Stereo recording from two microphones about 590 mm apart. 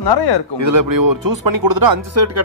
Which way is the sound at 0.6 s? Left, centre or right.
Right.